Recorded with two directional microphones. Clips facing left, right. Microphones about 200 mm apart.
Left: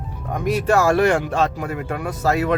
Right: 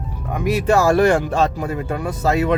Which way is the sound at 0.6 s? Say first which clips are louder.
Right 2 dB; 25° right (ahead or behind).